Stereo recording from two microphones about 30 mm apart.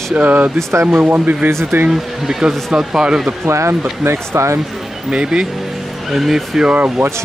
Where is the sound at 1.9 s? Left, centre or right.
Centre.